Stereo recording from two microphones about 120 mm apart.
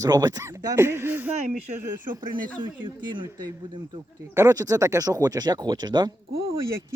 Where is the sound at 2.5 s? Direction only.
40° right (ahead or behind).